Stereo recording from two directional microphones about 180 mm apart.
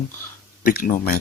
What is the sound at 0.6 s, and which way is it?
Speech, 55° left (ahead or behind).